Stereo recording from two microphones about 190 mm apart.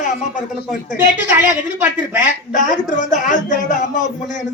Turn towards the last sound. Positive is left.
turn(degrees=40)  # may be behind; listen again after turning